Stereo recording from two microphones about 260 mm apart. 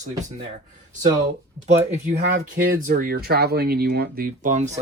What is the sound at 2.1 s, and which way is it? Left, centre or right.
Speech, right.